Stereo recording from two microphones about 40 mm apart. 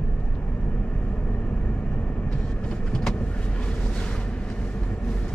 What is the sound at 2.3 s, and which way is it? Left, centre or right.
Vehicle, left.